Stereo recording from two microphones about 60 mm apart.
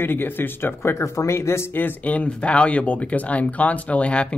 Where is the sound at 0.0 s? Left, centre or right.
Left.